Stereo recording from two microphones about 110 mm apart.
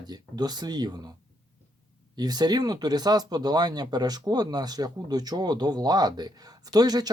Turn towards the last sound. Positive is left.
turn(degrees=-35)  # may be behind; listen again after turning